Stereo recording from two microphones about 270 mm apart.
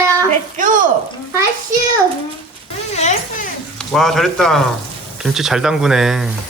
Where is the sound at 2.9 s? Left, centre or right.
Left.